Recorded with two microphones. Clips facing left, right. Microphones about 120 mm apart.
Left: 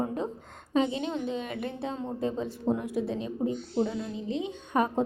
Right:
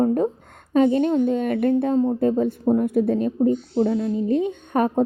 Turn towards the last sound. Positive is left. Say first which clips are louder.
# right 6 dB
turn(degrees=-50)  # may be behind; listen again after turning